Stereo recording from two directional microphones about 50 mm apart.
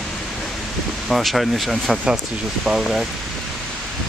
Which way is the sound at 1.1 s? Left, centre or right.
Centre.